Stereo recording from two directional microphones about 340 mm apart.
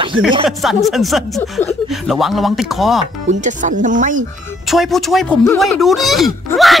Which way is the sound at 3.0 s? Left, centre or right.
Right.